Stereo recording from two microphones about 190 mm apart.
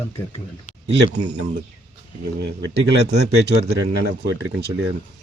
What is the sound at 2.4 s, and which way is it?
Speech, 65° right (ahead or behind).